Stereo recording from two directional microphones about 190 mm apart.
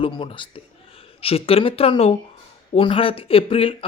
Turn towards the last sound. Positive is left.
turn(degrees=30)  # may be behind; listen again after turning